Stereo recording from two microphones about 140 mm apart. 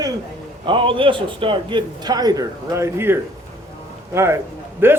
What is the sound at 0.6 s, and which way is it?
A man's voice, 35° right (ahead or behind).